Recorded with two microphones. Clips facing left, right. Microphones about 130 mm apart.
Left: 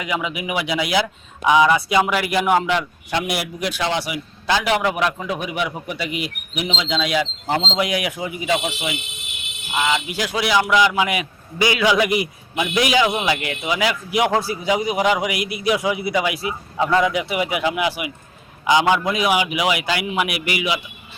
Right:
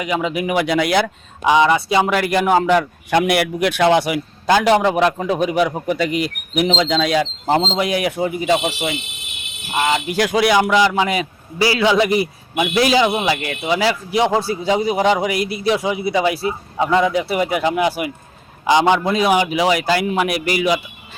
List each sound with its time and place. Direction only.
0.4 s speech: 45° right (ahead or behind)
1.5 s a man's voice: 30° right (ahead or behind); by 4.6 s 50° right (ahead or behind)
4.6 s a man's voice: 35° right (ahead or behind)
6.1 s speech: 5° left (ahead or behind)
6.5 s a man's voice: 45° right (ahead or behind)
10.7 s a man's voice: 40° right (ahead or behind)
16.7 s speech: 15° right (ahead or behind)
17.0 s a man's voice: 35° right (ahead or behind)